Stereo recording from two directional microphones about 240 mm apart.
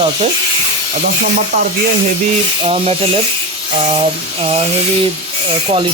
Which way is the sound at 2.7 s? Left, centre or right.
Right.